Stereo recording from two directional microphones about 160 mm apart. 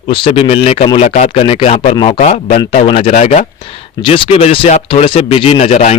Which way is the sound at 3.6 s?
35° left (ahead or behind).